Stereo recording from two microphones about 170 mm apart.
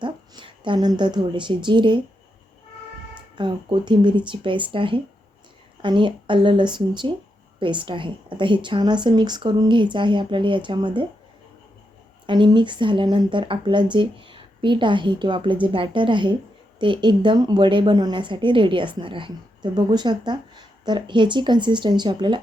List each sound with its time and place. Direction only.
0.0 s a woman's voice: 30° right (ahead or behind)
3.3 s a woman's voice: 25° right (ahead or behind)
12.2 s a woman's voice: 30° right (ahead or behind)